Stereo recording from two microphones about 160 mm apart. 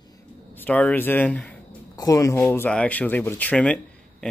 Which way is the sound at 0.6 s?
10° left (ahead or behind).